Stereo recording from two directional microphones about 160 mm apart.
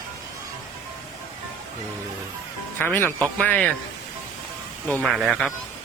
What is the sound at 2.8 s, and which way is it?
Speech, 10° left (ahead or behind).